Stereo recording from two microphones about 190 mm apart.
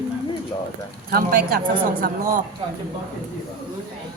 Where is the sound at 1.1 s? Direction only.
50° right (ahead or behind).